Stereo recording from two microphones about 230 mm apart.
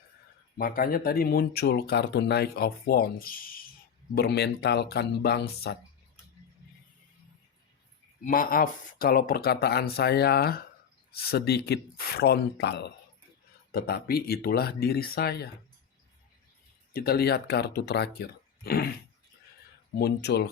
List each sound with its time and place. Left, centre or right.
0.5 s speech: left
8.2 s speech: left
16.9 s speech: left
20.0 s speech: left